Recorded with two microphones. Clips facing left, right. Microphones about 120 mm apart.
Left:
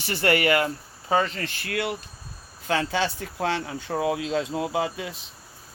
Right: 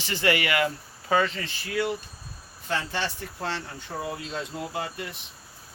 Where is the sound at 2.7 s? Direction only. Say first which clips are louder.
Left 5 dB; 90° left.